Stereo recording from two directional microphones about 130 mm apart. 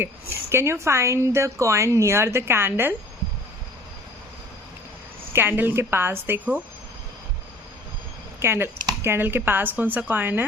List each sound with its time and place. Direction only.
0.5 s a woman's voice: 20° right (ahead or behind)
5.3 s a woman's voice: 15° right (ahead or behind)
8.4 s a woman's voice: 15° right (ahead or behind)